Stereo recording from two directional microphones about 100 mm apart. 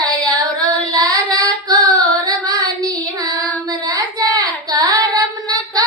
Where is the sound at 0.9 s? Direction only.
35° right (ahead or behind).